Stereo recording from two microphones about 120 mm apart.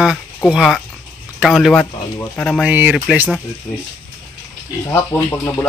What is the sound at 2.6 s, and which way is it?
Speech, 15° right (ahead or behind).